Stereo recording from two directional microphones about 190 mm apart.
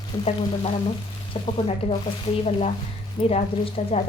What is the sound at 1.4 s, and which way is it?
A woman's voice, 30° left (ahead or behind).